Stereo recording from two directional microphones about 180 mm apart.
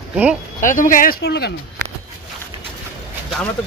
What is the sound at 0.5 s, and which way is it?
Speech, 45° left (ahead or behind).